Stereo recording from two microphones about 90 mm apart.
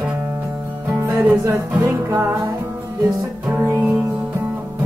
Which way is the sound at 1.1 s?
20° right (ahead or behind).